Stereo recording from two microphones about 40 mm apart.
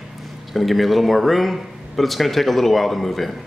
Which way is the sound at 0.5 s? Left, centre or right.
Centre.